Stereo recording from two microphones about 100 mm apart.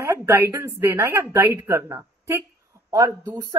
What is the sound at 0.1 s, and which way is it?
Speech, 25° right (ahead or behind).